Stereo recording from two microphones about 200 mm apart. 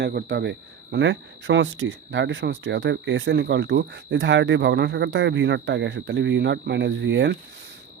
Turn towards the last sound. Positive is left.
turn(degrees=-60)  # may be behind; listen again after turning